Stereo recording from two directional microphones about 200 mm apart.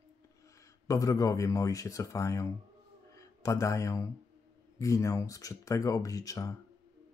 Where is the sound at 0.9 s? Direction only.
15° left (ahead or behind).